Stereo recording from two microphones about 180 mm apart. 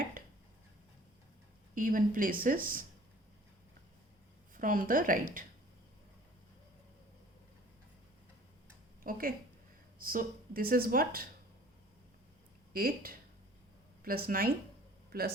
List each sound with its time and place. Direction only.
1.7 s speech: 50° right (ahead or behind)
4.5 s speech: 50° right (ahead or behind)
9.0 s speech: 50° right (ahead or behind)
12.7 s speech: 55° right (ahead or behind)